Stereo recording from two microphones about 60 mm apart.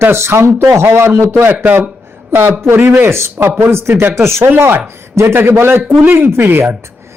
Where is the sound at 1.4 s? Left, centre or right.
Right.